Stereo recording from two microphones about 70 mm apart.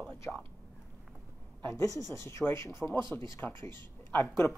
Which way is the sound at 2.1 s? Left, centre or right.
Left.